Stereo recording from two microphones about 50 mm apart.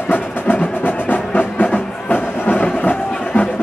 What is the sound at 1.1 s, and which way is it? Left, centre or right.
Music, left.